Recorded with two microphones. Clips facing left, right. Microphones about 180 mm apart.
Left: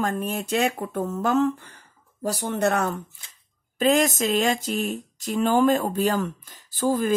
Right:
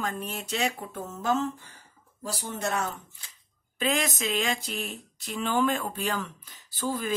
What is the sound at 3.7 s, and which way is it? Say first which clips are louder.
Speech: left 8 dB; 40° left (ahead or behind).